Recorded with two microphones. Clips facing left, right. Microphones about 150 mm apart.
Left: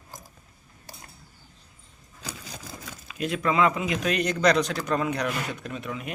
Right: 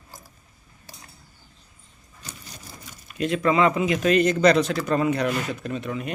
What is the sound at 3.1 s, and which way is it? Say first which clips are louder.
A man's voice: right 3 dB; centre (ahead or behind).